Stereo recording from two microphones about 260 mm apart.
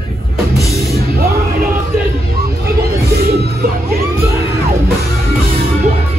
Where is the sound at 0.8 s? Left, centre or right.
Right.